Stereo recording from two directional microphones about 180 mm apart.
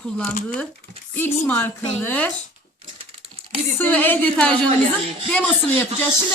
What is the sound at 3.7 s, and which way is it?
Speech, 10° left (ahead or behind).